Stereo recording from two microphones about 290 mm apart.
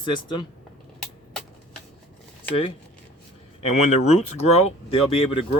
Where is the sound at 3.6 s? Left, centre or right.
Left.